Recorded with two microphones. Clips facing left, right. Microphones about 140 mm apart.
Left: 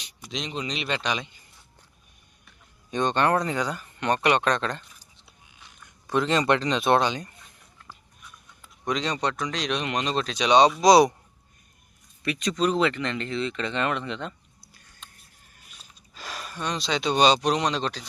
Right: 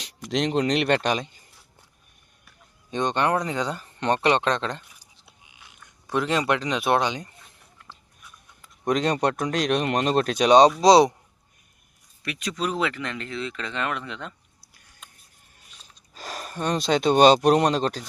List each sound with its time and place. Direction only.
0.0 s speech: 80° right; by 1.4 s 45° right (ahead or behind)
2.9 s speech: 20° right (ahead or behind)
6.1 s speech: 10° right (ahead or behind)
8.9 s speech: 50° right (ahead or behind)
10.8 s speech: 30° right (ahead or behind)
12.2 s speech: 5° right (ahead or behind)
16.1 s speech: 45° right (ahead or behind)